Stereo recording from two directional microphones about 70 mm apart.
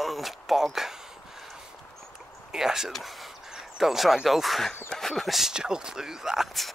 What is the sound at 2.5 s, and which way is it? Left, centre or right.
Speech, centre.